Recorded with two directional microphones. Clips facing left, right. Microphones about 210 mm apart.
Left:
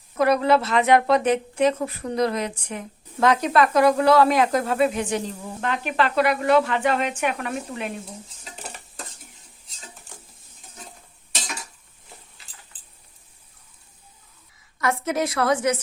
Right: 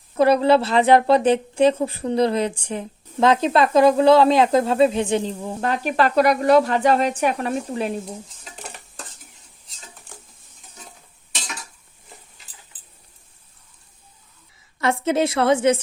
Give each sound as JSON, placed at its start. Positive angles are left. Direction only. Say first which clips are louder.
{"t": 0.2, "sound": "a woman's voice", "louder": "right 3 dB", "side_deg": -30}
{"t": 14.8, "sound": "a woman's voice", "louder": "right 4 dB", "side_deg": -25}